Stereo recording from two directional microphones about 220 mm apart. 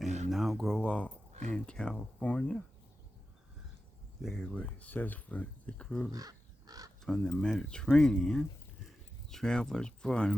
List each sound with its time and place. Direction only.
0.3 s a sound: centre (ahead or behind)
1.5 s speech: 5° left (ahead or behind)
4.2 s speech: centre (ahead or behind)
6.1 s crow: 15° right (ahead or behind)
7.0 s speech: 5° left (ahead or behind)